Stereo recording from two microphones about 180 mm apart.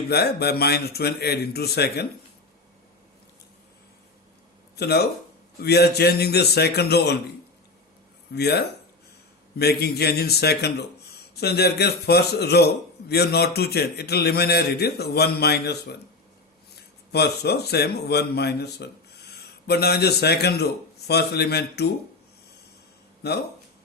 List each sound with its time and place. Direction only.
0.1 s speech: 65° left (ahead or behind)
4.8 s speech: 65° left (ahead or behind)
8.3 s speech: 65° left (ahead or behind)
17.1 s a man's voice: 65° left (ahead or behind)
23.2 s speech: 65° left (ahead or behind)